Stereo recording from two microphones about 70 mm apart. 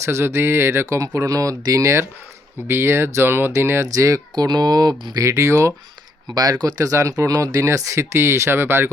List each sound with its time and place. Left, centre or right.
0.0 s speech: right
3.8 s speech: right
4.4 s speech: right
5.2 s speech: right
6.3 s speech: right